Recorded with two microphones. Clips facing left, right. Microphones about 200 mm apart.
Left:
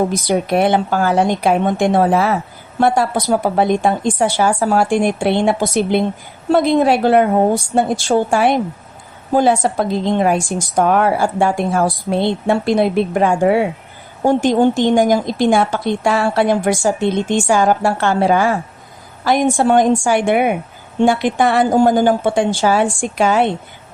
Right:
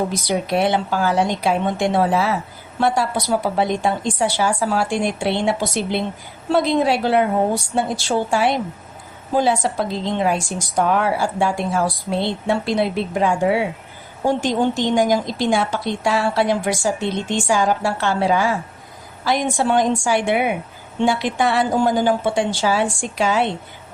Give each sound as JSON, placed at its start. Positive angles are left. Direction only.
{"t": 0.1, "sound": "a woman's voice", "side_deg": 50}